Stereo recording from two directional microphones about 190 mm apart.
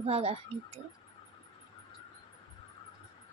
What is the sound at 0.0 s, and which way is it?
Speech, 30° right (ahead or behind).